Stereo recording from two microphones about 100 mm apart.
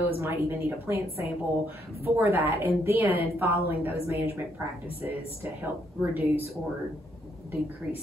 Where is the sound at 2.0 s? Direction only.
25° right (ahead or behind).